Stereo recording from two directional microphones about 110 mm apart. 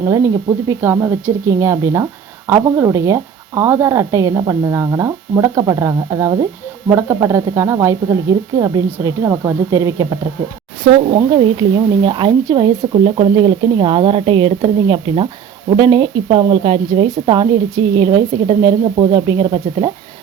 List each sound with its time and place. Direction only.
0.0 s speech: 30° right (ahead or behind)
10.9 s speech: 60° right (ahead or behind)
11.3 s speech: 50° right (ahead or behind)
12.9 s speech: 55° right (ahead or behind)
16.9 s speech: 45° right (ahead or behind)